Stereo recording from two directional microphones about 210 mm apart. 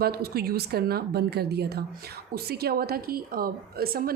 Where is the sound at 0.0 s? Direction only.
45° right (ahead or behind).